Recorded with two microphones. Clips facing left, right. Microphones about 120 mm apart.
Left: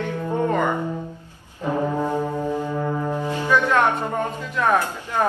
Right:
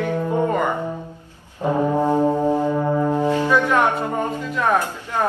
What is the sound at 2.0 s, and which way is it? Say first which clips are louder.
Brass instrument: right 5 dB; 15° right (ahead or behind).